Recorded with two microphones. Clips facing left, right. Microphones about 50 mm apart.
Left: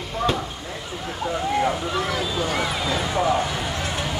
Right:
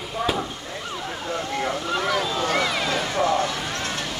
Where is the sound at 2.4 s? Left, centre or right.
Right.